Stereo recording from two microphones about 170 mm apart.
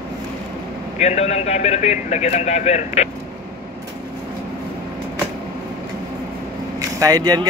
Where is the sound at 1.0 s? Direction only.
40° left (ahead or behind).